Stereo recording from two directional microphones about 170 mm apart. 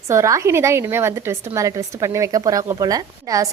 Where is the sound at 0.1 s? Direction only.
15° right (ahead or behind).